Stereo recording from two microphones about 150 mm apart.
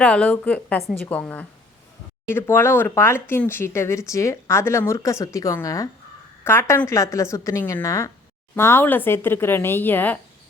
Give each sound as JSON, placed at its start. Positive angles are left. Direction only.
{"t": 0.0, "sound": "a woman's voice", "side_deg": 10}